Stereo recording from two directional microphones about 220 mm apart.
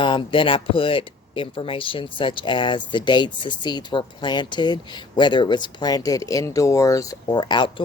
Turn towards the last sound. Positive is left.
turn(degrees=20)  # may be behind; listen again after turning